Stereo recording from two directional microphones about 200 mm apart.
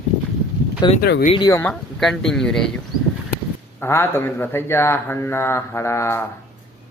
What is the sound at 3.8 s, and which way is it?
Speech, 10° left (ahead or behind).